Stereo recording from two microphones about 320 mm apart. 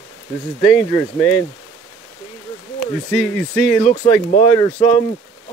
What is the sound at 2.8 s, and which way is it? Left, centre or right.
Speech, centre.